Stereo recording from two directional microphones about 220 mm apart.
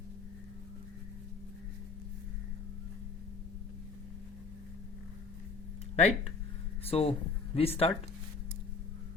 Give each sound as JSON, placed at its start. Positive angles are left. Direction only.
{"t": 6.0, "sound": "speech", "side_deg": 30}